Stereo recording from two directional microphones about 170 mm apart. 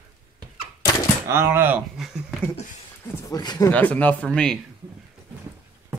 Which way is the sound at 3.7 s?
10° left (ahead or behind).